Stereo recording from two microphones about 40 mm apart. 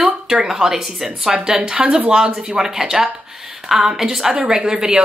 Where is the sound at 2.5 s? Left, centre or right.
Centre.